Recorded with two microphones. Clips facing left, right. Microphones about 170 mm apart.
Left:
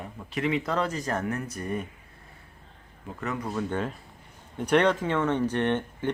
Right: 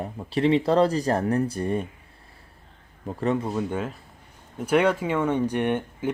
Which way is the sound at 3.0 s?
30° right (ahead or behind).